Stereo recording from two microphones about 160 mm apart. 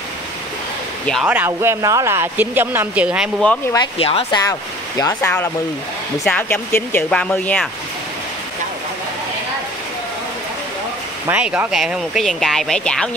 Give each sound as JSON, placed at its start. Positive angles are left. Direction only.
{"t": 1.2, "sound": "speech", "side_deg": -10}
{"t": 4.0, "sound": "speech", "side_deg": 35}
{"t": 4.4, "sound": "speech", "side_deg": 25}
{"t": 11.2, "sound": "speech", "side_deg": -10}